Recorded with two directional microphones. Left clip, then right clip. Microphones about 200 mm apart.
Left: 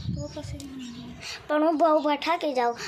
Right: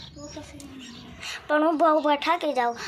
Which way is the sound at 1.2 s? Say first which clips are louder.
Right 1 dB; 5° left (ahead or behind).